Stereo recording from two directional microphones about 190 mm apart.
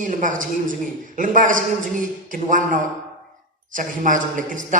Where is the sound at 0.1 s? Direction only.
45° right (ahead or behind).